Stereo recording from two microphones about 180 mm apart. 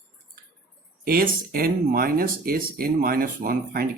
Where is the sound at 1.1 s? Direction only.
55° right (ahead or behind).